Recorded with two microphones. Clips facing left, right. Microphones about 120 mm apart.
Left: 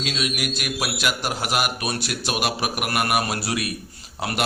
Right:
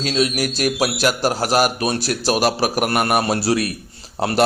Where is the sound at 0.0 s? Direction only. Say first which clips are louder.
Right 7 dB; 35° right (ahead or behind).